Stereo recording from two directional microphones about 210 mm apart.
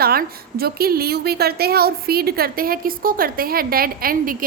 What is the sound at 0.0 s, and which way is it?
A woman's voice, 45° right (ahead or behind).